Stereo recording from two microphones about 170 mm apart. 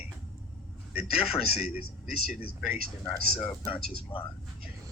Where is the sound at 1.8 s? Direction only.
65° left (ahead or behind).